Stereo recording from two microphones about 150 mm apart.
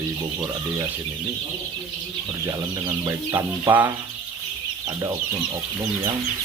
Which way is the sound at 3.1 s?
15° right (ahead or behind).